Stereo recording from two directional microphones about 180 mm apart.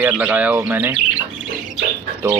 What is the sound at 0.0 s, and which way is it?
Speech, 10° right (ahead or behind).